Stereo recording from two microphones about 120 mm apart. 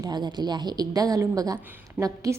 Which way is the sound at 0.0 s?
35° right (ahead or behind).